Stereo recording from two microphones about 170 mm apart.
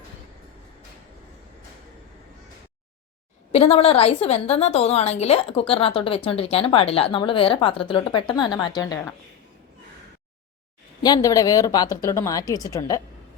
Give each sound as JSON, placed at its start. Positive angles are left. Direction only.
{"t": 3.5, "sound": "a woman's voice", "side_deg": 35}
{"t": 11.0, "sound": "a woman's voice", "side_deg": 20}